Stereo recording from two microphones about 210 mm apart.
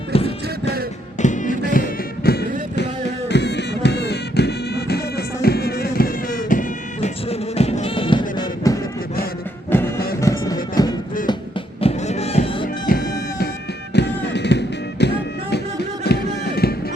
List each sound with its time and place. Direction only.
0.1 s music: 30° left (ahead or behind)
11.8 s music: 30° left (ahead or behind)
12.6 s music: 40° left (ahead or behind)
13.9 s music: 55° left (ahead or behind)
16.0 s run: 50° left (ahead or behind)